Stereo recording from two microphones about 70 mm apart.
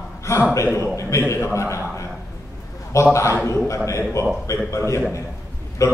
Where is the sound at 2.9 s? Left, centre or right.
Left.